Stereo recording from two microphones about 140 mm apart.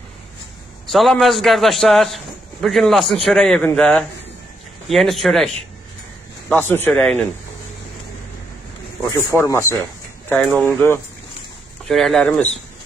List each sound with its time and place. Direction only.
0.8 s a man's voice: centre (ahead or behind)
6.5 s speech: 15° left (ahead or behind)
9.3 s speech: 20° left (ahead or behind)
11.9 s a man's voice: centre (ahead or behind)